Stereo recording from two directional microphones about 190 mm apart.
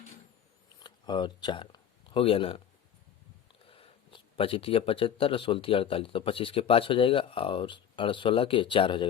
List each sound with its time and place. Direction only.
0.8 s speech: 25° left (ahead or behind)
3.7 s speech: 30° left (ahead or behind)